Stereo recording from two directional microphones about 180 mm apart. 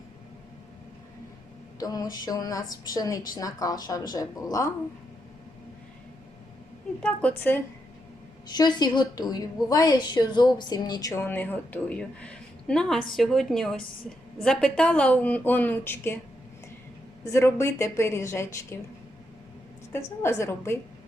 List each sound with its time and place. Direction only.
1.8 s a woman's voice: 20° left (ahead or behind)
7.0 s a woman's voice: 5° left (ahead or behind)
8.4 s a woman's voice: 25° left (ahead or behind)
17.3 s a woman's voice: 15° left (ahead or behind)
20.2 s a woman's voice: 15° left (ahead or behind)